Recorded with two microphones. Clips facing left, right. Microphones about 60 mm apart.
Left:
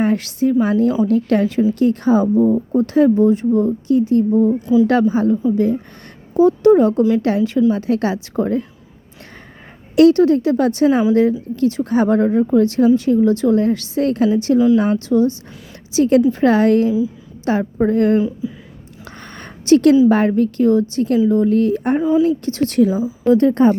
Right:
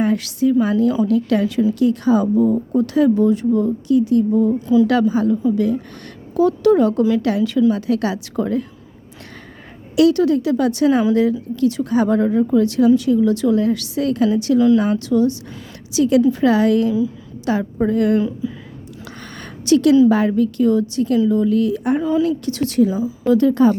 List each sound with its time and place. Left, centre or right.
0.0 s a woman's voice: left
9.9 s a woman's voice: left
18.4 s a woman's voice: centre
19.4 s a sound: left
20.1 s a woman's voice: left
22.0 s a woman's voice: centre
22.4 s a woman's voice: left
23.0 s speech: left
23.4 s a woman's voice: left